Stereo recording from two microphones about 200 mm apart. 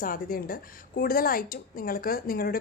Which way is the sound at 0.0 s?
45° left (ahead or behind).